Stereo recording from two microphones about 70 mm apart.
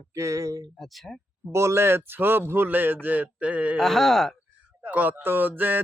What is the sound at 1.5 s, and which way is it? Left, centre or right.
Speech, right.